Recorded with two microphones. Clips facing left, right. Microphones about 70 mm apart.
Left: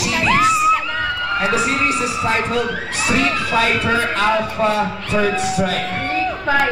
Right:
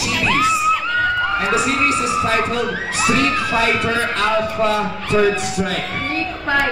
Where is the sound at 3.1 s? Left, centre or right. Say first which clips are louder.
Even; centre.